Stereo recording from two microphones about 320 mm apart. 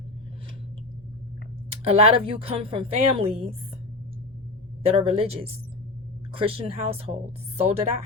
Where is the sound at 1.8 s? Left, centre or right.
Centre.